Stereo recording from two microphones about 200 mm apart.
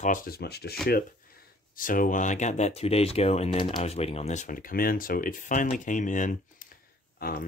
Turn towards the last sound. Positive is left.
turn(degrees=50)  # may be behind; listen again after turning